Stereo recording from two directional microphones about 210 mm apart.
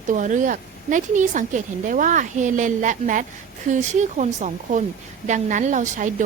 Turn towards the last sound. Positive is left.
turn(degrees=-35)  # may be behind; listen again after turning